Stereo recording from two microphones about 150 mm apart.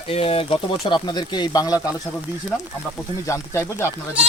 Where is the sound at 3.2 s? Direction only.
20° left (ahead or behind).